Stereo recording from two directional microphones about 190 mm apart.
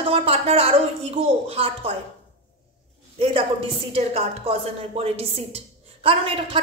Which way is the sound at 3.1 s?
30° right (ahead or behind).